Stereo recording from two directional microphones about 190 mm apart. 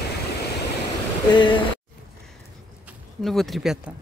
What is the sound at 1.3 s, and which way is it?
Speech, 25° left (ahead or behind).